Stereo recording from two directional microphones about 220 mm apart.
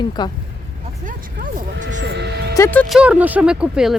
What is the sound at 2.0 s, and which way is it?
Music, 50° right (ahead or behind).